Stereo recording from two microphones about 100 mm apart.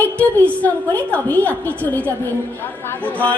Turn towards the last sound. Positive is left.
turn(degrees=15)  # may be behind; listen again after turning